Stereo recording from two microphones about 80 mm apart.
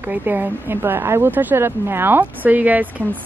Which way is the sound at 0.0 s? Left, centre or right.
Right.